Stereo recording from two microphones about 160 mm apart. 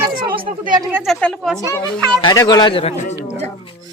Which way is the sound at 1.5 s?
20° left (ahead or behind).